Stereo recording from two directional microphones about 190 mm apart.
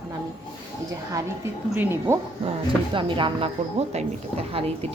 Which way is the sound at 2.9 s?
25° right (ahead or behind).